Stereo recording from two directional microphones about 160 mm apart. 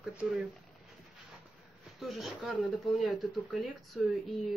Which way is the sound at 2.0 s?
Centre (ahead or behind).